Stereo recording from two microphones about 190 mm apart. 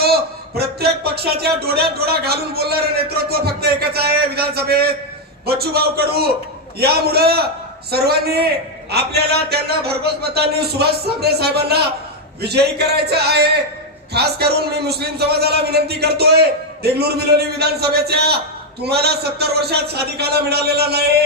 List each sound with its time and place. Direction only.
0.0 s speech: 55° right (ahead or behind)